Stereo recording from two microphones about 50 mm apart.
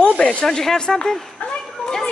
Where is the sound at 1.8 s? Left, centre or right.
Centre.